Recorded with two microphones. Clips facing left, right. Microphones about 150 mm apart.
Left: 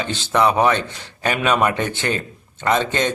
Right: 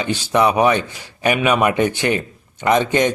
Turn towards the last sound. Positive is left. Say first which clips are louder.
# right 4 dB
turn(degrees=-15)  # may be behind; listen again after turning